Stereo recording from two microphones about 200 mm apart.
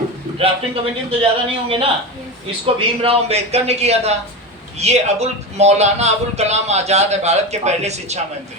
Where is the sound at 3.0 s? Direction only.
30° right (ahead or behind).